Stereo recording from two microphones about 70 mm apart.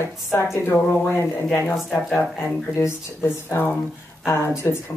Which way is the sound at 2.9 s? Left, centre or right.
Left.